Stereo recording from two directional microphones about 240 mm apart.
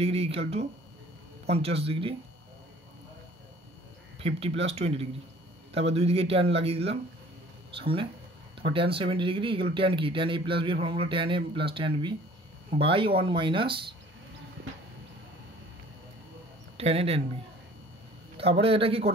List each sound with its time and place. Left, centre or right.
0.0 s speech: right
4.2 s speech: right
16.7 s speech: right
18.4 s speech: right